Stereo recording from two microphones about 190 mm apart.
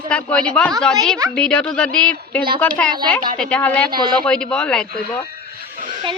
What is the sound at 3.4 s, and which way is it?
A woman's voice, 5° left (ahead or behind).